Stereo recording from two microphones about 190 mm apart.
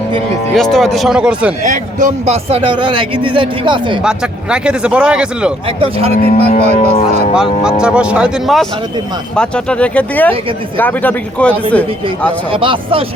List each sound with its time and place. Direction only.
0.5 s a man's voice: centre (ahead or behind)
1.6 s a man's voice: 45° right (ahead or behind); by 3.9 s 25° right (ahead or behind)
4.0 s a man's voice: 5° right (ahead or behind)
6.2 s speech: 35° left (ahead or behind)
7.3 s a man's voice: 5° right (ahead or behind)
12.5 s a man's voice: 25° right (ahead or behind)